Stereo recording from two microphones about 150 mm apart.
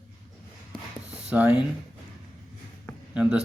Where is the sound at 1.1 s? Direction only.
5° right (ahead or behind).